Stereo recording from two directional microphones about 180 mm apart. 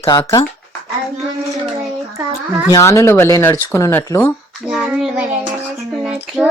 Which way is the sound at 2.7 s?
15° left (ahead or behind).